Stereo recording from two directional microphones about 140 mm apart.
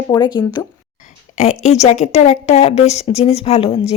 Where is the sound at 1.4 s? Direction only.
55° left (ahead or behind).